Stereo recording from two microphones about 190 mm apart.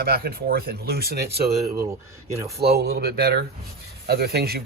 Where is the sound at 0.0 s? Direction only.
50° right (ahead or behind).